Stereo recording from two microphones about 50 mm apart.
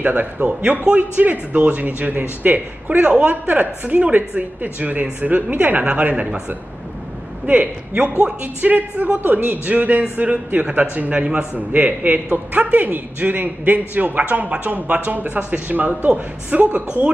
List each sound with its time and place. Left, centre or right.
0.0 s a man's voice: right
7.4 s a man's voice: right